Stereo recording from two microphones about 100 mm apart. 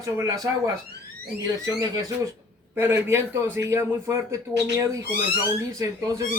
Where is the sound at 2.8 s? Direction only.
25° right (ahead or behind).